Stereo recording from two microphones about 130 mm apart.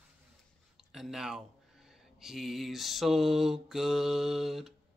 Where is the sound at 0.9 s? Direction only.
5° right (ahead or behind).